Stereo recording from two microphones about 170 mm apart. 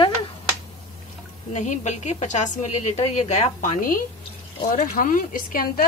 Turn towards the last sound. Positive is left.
turn(degrees=55)  # may be behind; listen again after turning